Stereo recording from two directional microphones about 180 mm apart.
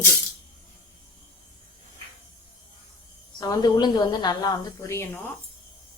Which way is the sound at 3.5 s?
25° left (ahead or behind).